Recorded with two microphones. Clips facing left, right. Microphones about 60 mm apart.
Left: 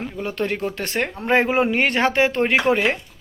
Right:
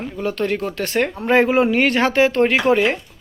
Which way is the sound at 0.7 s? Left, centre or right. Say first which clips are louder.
Right 4 dB; left.